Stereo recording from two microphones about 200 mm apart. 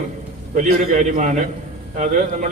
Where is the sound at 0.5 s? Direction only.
40° right (ahead or behind).